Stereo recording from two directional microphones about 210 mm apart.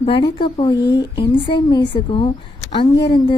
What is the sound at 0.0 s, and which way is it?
A woman's voice, 25° left (ahead or behind).